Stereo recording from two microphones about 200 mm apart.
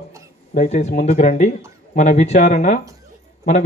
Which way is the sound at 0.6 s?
35° left (ahead or behind).